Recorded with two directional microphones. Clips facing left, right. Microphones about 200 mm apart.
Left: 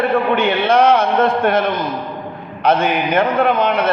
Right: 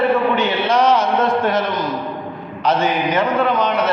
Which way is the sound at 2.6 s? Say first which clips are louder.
Left 2 dB; 55° left (ahead or behind).